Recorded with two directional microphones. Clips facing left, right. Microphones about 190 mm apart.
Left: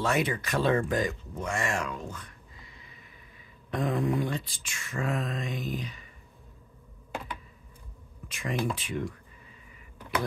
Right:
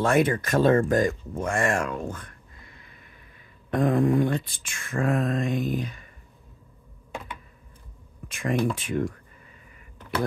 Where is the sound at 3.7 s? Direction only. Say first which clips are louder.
Right 7 dB; 55° right (ahead or behind).